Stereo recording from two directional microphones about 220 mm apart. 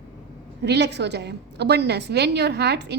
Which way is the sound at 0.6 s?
50° right (ahead or behind).